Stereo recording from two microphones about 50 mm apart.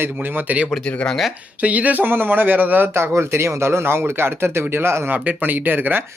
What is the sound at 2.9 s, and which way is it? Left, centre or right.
Speech, right.